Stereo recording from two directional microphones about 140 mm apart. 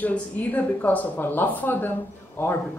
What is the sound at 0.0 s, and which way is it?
Speech, 10° left (ahead or behind).